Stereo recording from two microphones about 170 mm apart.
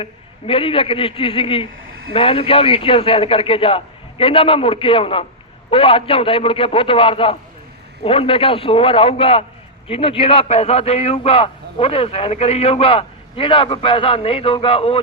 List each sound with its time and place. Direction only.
0.0 s a man's voice: 35° left (ahead or behind)